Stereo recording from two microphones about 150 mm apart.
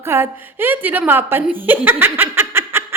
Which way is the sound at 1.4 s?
10° right (ahead or behind).